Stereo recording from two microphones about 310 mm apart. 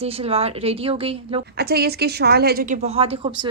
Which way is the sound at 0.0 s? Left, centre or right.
Centre.